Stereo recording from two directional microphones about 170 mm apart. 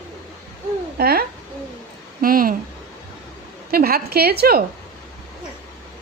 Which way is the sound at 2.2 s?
55° right (ahead or behind).